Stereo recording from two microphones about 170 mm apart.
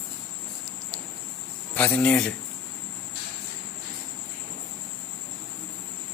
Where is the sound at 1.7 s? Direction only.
5° left (ahead or behind).